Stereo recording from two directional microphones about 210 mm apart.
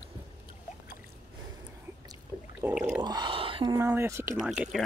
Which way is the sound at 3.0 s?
20° right (ahead or behind).